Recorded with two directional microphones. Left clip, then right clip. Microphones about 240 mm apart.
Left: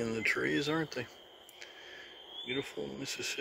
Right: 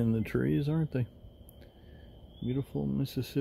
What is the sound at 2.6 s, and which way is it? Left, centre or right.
Speech, centre.